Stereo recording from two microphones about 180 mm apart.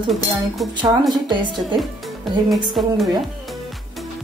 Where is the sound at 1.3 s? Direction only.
25° right (ahead or behind).